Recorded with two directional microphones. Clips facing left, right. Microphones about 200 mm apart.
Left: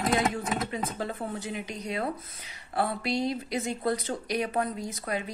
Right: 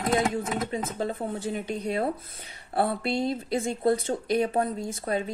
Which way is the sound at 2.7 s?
30° right (ahead or behind).